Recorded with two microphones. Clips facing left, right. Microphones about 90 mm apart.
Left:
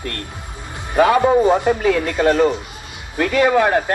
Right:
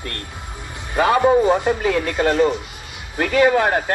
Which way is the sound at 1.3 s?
20° left (ahead or behind).